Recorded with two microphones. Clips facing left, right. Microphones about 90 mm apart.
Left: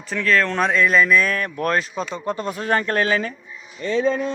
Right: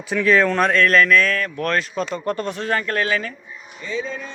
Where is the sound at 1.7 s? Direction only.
5° left (ahead or behind).